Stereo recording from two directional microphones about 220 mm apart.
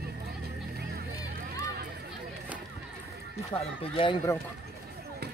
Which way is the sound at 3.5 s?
25° left (ahead or behind).